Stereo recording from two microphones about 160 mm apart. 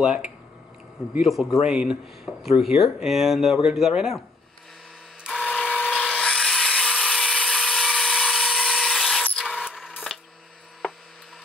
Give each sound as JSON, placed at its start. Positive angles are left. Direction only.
{"t": 0.0, "sound": "speech", "side_deg": -5}
{"t": 2.3, "sound": "speech", "side_deg": 20}
{"t": 2.6, "sound": "speech", "side_deg": 0}
{"t": 5.4, "sound": "a sound", "side_deg": 10}